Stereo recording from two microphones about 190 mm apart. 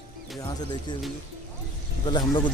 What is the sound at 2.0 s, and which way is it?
Speech, 25° left (ahead or behind).